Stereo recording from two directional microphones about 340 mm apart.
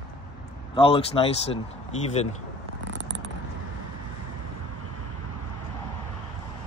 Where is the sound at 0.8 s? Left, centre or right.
Centre.